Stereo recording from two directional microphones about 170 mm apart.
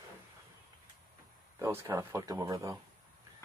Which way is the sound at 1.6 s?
15° right (ahead or behind).